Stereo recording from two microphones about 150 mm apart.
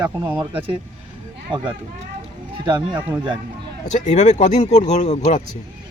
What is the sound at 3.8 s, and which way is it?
Speech, 55° left (ahead or behind).